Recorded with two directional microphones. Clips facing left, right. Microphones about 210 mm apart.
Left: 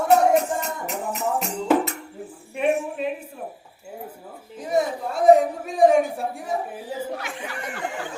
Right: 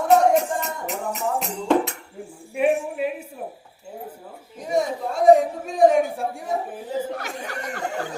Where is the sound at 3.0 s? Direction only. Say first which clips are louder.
Right 1 dB; 10° right (ahead or behind).